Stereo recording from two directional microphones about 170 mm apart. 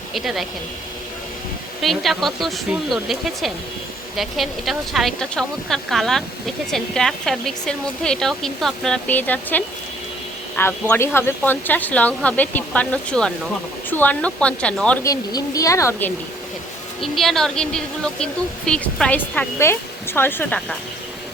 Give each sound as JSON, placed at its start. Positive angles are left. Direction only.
{"t": 0.1, "sound": "speech", "side_deg": 0}
{"t": 1.8, "sound": "speech", "side_deg": 0}
{"t": 15.0, "sound": "speech", "side_deg": 20}
{"t": 17.0, "sound": "speech", "side_deg": 0}